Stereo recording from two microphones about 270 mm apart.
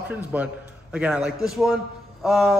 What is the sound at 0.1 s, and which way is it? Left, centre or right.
A man's voice, centre.